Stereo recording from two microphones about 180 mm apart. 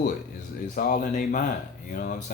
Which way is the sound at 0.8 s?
50° left (ahead or behind).